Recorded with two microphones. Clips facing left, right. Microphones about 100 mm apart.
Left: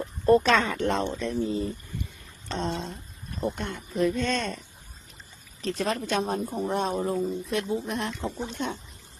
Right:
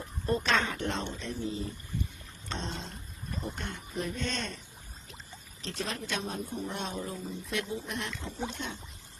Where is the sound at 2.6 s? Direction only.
55° left (ahead or behind).